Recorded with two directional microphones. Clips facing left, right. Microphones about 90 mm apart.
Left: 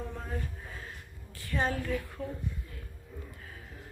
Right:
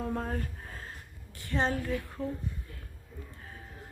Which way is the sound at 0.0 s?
50° right (ahead or behind).